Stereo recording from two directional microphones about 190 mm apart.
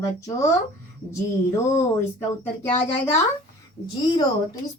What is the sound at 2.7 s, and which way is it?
Speech, 15° left (ahead or behind).